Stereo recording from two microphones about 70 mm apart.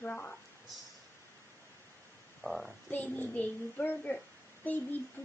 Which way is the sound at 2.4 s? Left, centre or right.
Centre.